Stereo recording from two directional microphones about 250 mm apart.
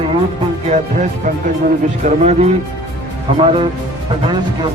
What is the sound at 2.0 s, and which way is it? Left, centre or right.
Speech, right.